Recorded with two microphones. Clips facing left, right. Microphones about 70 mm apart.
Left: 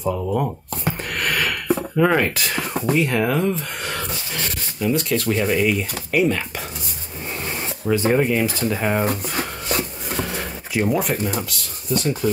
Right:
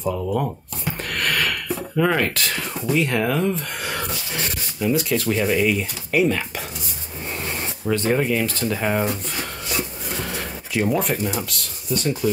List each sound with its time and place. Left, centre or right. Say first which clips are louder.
0.0 s speech: left 1 dB; centre
1.1 s a sound: right 1 dB; centre
2.0 s speech: left 1 dB; centre
9.0 s speech: left 2 dB; left
10.1 s speech: left 3 dB; centre